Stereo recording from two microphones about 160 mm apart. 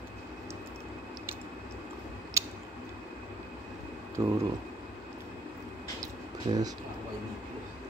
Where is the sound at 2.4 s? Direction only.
20° right (ahead or behind).